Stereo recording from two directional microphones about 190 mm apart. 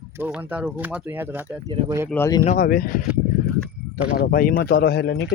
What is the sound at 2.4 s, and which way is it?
Speech, 45° left (ahead or behind).